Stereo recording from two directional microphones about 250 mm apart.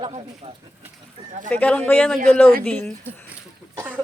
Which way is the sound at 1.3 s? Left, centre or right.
Right.